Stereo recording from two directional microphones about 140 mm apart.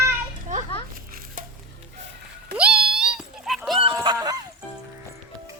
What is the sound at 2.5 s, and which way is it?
Cat, 10° right (ahead or behind).